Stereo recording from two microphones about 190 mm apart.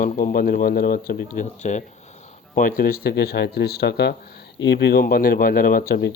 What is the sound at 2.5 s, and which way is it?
Speech, 50° left (ahead or behind).